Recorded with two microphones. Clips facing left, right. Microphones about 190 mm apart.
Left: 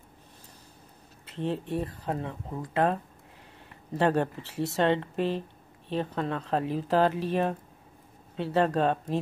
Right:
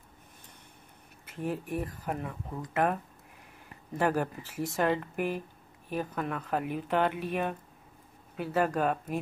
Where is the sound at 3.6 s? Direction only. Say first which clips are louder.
Left 3 dB; 25° left (ahead or behind).